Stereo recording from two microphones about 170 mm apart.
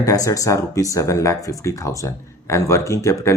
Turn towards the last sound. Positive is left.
turn(degrees=15)  # may be behind; listen again after turning